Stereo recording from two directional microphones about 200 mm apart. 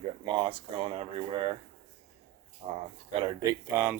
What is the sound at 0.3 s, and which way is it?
Speech, 25° right (ahead or behind).